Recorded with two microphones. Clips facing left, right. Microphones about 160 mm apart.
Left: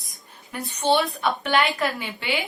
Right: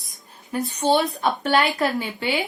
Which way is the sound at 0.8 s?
40° right (ahead or behind).